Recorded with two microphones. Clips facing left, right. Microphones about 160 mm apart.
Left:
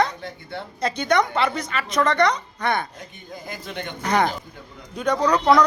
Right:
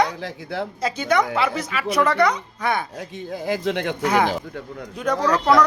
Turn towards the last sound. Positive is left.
turn(degrees=0)  # may be behind; listen again after turning